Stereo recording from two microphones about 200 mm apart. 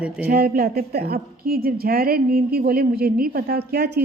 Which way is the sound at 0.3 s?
50° right (ahead or behind).